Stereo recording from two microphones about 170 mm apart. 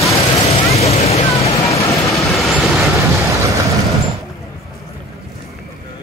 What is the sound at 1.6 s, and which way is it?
Vehicle, 20° left (ahead or behind).